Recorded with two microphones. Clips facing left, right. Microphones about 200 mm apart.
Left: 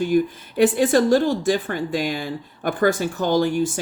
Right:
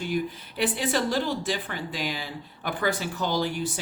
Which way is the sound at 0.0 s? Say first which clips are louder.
Left 9 dB; 45° left (ahead or behind).